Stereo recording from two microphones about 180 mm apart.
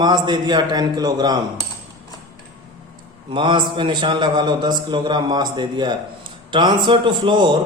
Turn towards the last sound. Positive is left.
turn(degrees=-25)  # may be behind; listen again after turning